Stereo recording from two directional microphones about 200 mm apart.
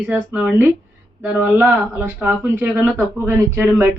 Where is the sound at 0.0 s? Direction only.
10° right (ahead or behind).